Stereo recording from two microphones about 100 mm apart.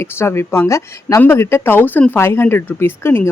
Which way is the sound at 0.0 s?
25° left (ahead or behind).